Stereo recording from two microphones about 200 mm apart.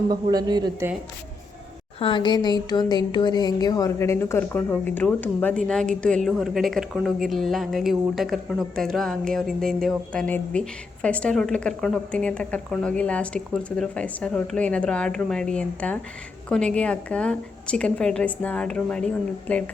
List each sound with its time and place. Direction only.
0.1 s a woman's voice: 20° right (ahead or behind)
2.0 s speech: 25° left (ahead or behind); by 19.6 s 5° left (ahead or behind)